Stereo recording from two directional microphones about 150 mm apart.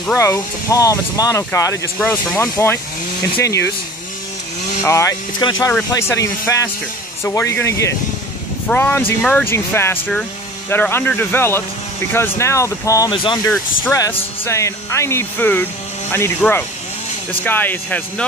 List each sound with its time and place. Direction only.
0.2 s speech: 20° left (ahead or behind)
4.8 s speech: 20° left (ahead or behind)
13.1 s speech: 35° left (ahead or behind)
13.9 s speech: 20° left (ahead or behind)